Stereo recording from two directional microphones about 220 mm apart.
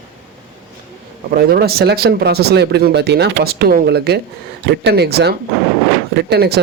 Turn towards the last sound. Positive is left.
turn(degrees=-45)  # may be behind; listen again after turning